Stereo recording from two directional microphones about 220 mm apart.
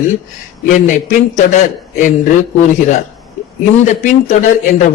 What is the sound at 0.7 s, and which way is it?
A man's voice, 35° left (ahead or behind).